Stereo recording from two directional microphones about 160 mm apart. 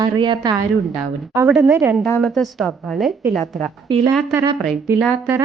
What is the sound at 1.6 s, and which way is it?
Speech, 15° right (ahead or behind).